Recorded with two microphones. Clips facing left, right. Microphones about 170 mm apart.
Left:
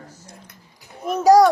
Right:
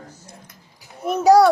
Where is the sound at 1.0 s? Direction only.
5° right (ahead or behind).